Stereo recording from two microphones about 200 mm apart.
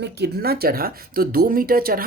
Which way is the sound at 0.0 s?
55° right (ahead or behind).